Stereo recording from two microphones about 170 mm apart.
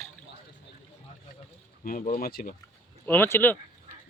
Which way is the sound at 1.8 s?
55° left (ahead or behind).